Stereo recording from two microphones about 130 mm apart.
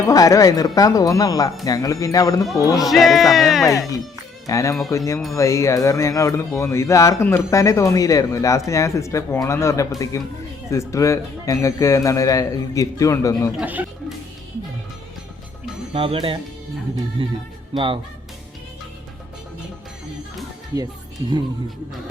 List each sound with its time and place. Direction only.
0.1 s speech: 25° left (ahead or behind)
2.7 s music: centre (ahead or behind)
4.4 s speech: 25° left (ahead or behind)
13.6 s speech: 10° right (ahead or behind)
15.9 s speech: 45° right (ahead or behind)
17.7 s speech: 40° right (ahead or behind)
20.7 s speech: 25° right (ahead or behind)